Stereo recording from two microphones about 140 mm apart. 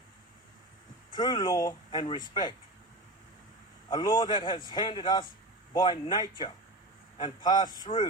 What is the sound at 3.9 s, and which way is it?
A man's voice, 35° left (ahead or behind).